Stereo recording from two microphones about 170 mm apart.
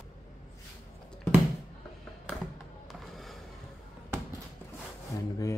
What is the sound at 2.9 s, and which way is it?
Music, centre (ahead or behind).